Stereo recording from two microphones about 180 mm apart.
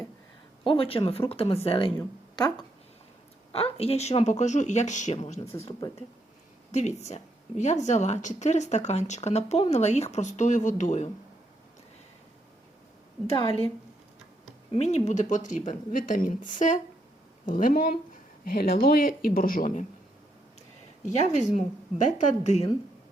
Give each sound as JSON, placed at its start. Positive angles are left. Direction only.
{"t": 0.6, "sound": "speech", "side_deg": 30}
{"t": 3.5, "sound": "speech", "side_deg": 35}
{"t": 6.7, "sound": "speech", "side_deg": 40}
{"t": 14.7, "sound": "a woman's voice", "side_deg": 35}
{"t": 21.0, "sound": "speech", "side_deg": 40}